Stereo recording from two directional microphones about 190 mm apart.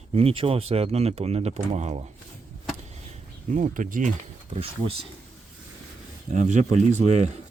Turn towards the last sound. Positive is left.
turn(degrees=-35)  # may be behind; listen again after turning